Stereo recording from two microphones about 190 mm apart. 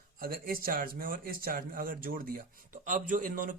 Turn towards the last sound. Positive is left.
turn(degrees=-45)  # may be behind; listen again after turning